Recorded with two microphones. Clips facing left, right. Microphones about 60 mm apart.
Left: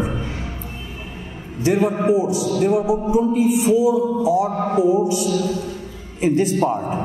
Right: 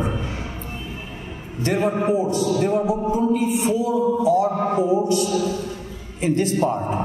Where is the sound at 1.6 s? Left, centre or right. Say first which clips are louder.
Left 3 dB; centre.